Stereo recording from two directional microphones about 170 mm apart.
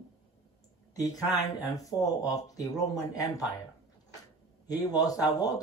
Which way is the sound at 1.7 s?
20° left (ahead or behind).